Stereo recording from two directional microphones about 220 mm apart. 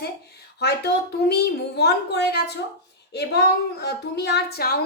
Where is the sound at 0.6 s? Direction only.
50° left (ahead or behind).